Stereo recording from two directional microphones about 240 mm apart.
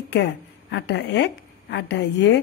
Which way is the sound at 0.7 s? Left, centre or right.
Left.